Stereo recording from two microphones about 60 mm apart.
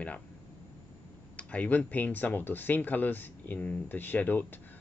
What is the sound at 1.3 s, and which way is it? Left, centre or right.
Speech, left.